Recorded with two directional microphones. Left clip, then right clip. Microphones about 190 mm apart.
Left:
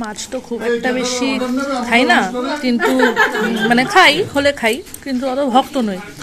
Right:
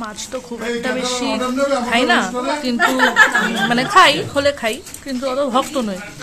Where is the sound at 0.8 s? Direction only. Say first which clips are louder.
Left 2 dB; 15° left (ahead or behind).